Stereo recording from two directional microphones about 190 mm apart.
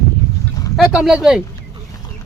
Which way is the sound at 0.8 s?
5° right (ahead or behind).